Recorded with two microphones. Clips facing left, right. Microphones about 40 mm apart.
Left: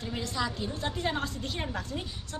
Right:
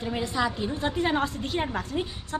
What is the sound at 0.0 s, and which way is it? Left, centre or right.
A woman's voice, centre.